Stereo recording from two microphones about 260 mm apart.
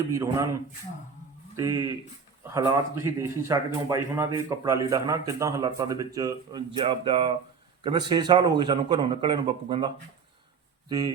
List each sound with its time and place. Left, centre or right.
0.1 s a man's voice: centre